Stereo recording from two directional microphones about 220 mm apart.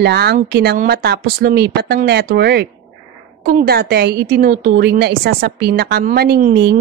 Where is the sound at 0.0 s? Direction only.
45° right (ahead or behind).